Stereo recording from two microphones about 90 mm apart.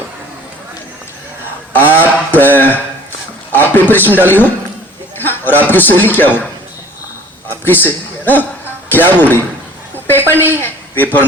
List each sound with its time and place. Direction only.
1.7 s a sound: 25° left (ahead or behind)
3.5 s a man's voice: 20° left (ahead or behind)
7.6 s a man's voice: 20° left (ahead or behind)